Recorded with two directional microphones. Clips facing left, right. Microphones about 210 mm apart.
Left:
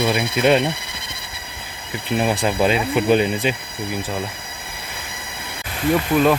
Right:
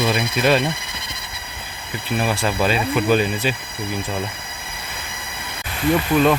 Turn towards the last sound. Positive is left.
turn(degrees=5)  # may be behind; listen again after turning